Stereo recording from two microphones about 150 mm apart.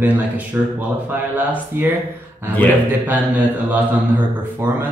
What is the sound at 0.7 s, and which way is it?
Speech, 10° right (ahead or behind).